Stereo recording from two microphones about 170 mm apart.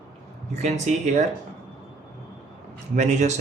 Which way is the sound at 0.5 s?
40° right (ahead or behind).